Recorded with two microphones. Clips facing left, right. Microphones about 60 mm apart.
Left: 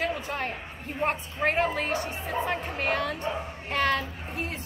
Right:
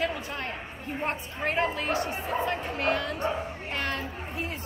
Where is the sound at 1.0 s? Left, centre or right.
Left.